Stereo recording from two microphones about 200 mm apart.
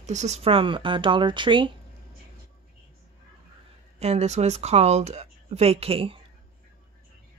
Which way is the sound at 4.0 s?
35° right (ahead or behind).